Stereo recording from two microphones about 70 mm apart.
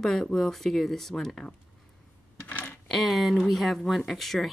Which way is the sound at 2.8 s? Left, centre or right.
Centre.